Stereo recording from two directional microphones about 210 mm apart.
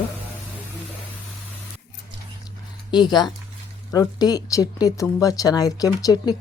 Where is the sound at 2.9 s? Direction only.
20° left (ahead or behind).